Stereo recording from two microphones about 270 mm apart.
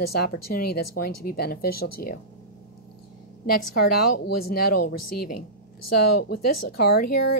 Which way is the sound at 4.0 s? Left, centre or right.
Left.